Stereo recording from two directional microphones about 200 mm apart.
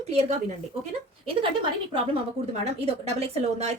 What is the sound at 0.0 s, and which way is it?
A woman's voice, 30° right (ahead or behind).